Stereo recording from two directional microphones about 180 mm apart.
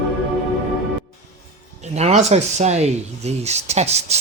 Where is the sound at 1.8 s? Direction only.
40° right (ahead or behind).